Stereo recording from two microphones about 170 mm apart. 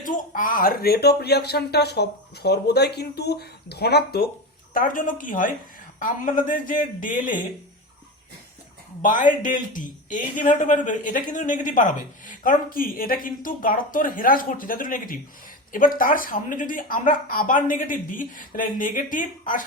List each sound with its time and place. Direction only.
0.0 s speech: 50° left (ahead or behind); by 4.3 s 70° left (ahead or behind)
4.7 s a man's voice: 55° left (ahead or behind)
9.0 s a man's voice: 50° left (ahead or behind)